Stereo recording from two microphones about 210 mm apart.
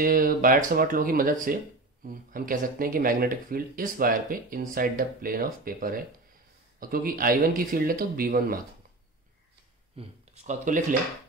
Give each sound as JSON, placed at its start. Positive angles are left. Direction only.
{"t": 0.0, "sound": "speech", "side_deg": -40}
{"t": 9.9, "sound": "speech", "side_deg": -30}